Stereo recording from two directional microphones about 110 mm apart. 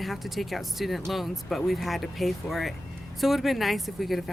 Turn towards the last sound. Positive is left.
turn(degrees=0)  # may be behind; listen again after turning